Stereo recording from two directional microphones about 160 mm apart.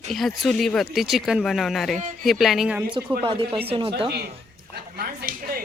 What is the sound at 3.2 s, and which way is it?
Speech, 30° right (ahead or behind).